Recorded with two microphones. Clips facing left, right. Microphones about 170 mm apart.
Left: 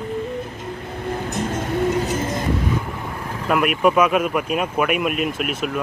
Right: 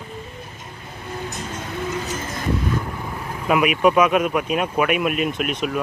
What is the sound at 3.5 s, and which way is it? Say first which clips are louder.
Speech: right 1 dB; centre (ahead or behind).